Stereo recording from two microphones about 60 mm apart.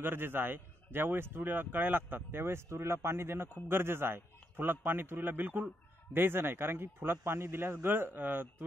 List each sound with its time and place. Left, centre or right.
0.0 s speech: right